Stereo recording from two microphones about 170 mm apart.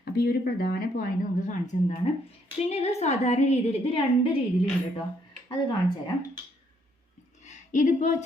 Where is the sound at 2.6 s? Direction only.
40° left (ahead or behind).